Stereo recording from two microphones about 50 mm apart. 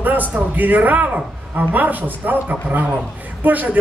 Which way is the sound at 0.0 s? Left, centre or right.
Right.